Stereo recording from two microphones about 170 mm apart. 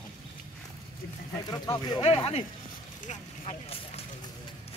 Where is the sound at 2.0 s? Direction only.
35° left (ahead or behind).